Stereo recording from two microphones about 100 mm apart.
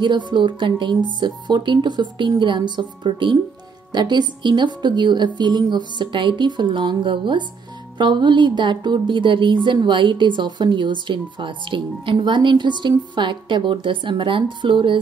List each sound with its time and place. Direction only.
0.0 s a woman's voice: 50° right (ahead or behind)